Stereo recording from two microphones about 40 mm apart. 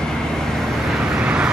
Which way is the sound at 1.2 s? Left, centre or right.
Right.